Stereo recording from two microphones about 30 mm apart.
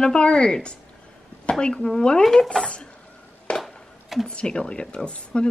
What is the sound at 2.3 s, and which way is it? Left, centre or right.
Speech, centre.